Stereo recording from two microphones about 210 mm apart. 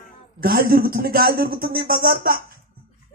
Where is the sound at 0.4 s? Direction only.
45° right (ahead or behind).